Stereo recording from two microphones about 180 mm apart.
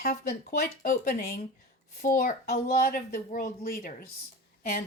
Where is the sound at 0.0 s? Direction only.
55° left (ahead or behind).